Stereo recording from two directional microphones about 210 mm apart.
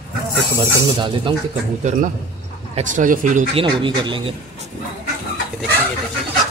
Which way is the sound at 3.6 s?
25° right (ahead or behind).